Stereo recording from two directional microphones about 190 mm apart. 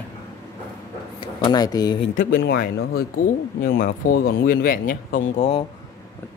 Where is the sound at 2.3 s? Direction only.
70° left (ahead or behind); by 5.4 s 45° left (ahead or behind).